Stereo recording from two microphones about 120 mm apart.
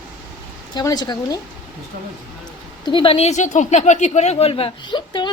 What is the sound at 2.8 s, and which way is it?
Speech, 45° left (ahead or behind).